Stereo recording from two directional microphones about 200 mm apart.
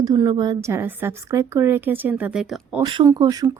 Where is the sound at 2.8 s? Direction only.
20° right (ahead or behind).